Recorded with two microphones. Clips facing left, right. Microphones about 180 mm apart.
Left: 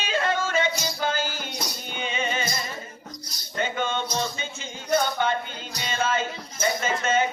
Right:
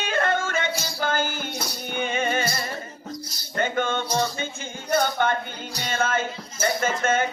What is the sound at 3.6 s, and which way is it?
Music, 50° right (ahead or behind).